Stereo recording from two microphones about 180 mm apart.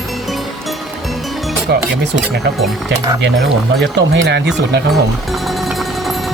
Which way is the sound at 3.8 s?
75° right (ahead or behind).